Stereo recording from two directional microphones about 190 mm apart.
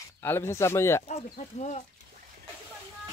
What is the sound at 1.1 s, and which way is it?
Speech, 35° left (ahead or behind).